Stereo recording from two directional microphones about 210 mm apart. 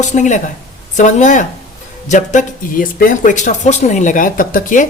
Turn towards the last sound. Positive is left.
turn(degrees=40)  # may be behind; listen again after turning